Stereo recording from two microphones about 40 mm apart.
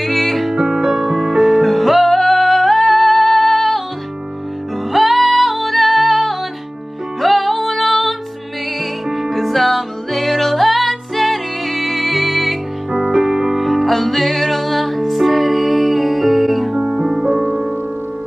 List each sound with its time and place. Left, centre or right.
0.0 s music: centre
0.5 s music: centre
1.7 s music: centre
4.9 s music: centre
13.1 s music: centre
16.7 s music: right